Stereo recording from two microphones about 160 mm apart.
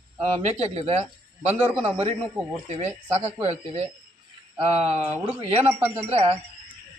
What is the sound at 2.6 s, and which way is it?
Speech, 40° right (ahead or behind).